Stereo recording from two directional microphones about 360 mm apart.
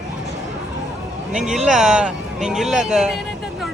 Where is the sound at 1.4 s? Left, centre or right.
Centre.